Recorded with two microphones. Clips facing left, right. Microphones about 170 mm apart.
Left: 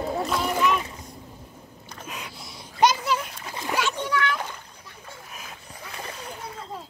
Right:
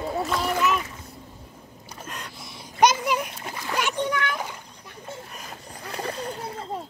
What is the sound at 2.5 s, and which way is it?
Babbling, 20° right (ahead or behind).